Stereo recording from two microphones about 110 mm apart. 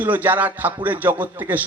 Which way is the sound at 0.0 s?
15° right (ahead or behind).